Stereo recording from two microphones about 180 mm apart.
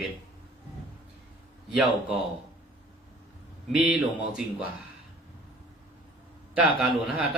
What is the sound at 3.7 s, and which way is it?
Speech, 5° right (ahead or behind).